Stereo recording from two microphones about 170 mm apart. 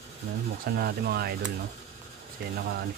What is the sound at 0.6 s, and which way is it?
Speech, 65° right (ahead or behind).